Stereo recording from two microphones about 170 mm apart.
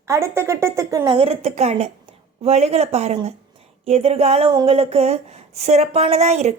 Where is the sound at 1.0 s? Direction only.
30° right (ahead or behind).